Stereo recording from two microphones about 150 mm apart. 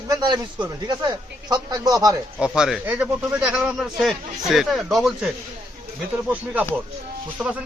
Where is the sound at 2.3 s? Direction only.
5° right (ahead or behind).